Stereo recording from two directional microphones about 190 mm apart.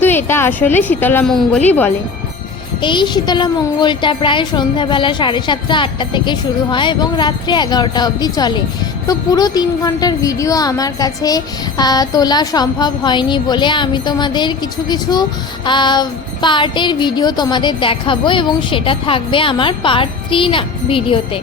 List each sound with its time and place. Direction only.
0.0 s a woman's voice: 10° left (ahead or behind)
2.8 s a woman's voice: 25° left (ahead or behind)